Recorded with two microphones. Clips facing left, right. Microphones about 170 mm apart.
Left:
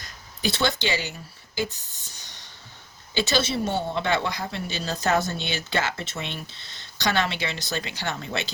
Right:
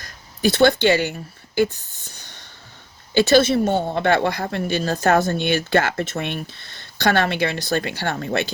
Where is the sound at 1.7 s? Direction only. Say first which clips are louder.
Right 4 dB; 55° right (ahead or behind).